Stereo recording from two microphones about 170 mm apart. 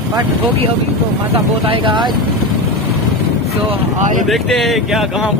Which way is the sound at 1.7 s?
30° right (ahead or behind).